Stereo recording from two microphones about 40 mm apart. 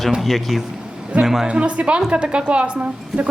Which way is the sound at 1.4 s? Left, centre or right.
Right.